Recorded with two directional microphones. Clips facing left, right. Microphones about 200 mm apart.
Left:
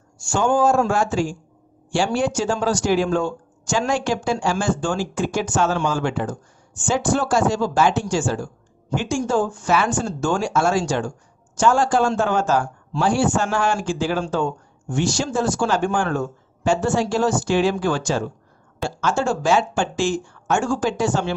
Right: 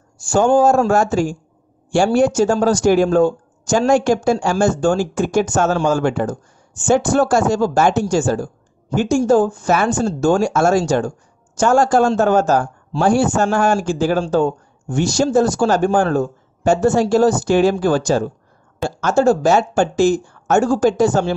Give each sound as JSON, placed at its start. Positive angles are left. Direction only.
{"t": 0.3, "sound": "a man's voice", "side_deg": -40}